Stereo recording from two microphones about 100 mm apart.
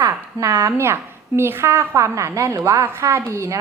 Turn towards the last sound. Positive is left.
turn(degrees=-30)  # may be behind; listen again after turning